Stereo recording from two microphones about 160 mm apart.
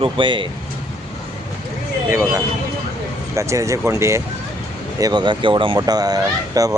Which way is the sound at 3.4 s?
20° right (ahead or behind).